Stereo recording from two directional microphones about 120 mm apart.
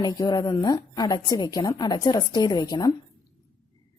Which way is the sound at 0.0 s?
30° left (ahead or behind).